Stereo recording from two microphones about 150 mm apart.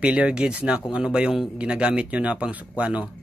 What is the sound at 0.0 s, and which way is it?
Speech, 10° right (ahead or behind).